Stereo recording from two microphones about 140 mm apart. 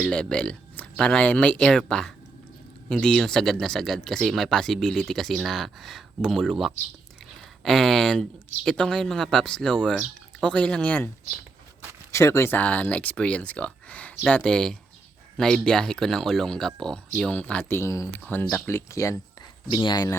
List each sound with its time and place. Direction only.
0.0 s speech: 5° left (ahead or behind)
12.1 s speech: 20° left (ahead or behind)
19.7 s a man's voice: 35° left (ahead or behind)